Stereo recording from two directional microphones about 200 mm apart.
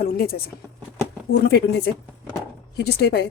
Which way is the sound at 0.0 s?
50° left (ahead or behind).